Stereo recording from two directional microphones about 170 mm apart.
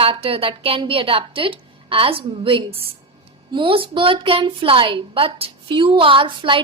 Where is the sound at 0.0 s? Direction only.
35° right (ahead or behind).